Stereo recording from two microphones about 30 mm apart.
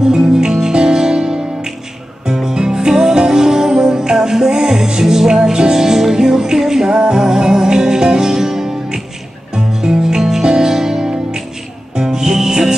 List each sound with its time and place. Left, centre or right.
0.0 s music: right